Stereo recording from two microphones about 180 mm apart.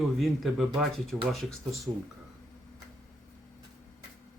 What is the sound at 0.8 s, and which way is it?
Speech, centre (ahead or behind).